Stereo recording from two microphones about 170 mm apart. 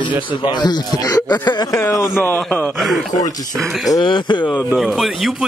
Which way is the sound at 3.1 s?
20° left (ahead or behind).